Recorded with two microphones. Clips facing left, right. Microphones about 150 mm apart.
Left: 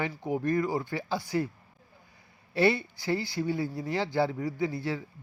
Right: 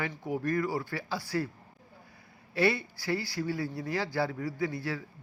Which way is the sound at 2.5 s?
25° left (ahead or behind).